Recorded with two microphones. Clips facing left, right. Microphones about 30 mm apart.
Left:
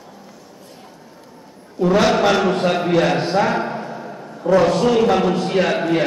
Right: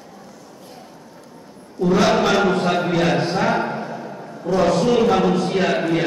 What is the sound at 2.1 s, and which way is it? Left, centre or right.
A man's voice, centre.